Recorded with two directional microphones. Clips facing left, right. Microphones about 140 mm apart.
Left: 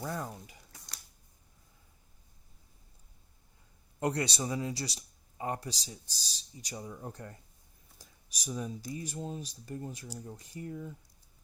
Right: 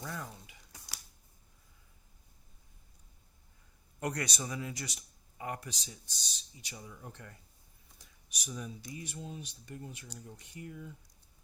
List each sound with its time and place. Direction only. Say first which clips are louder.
0.0 s speech: left 5 dB; 35° left (ahead or behind)
4.0 s speech: left 5 dB; 30° left (ahead or behind)